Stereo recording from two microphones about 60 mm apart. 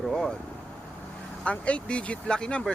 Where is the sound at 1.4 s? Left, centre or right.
Left.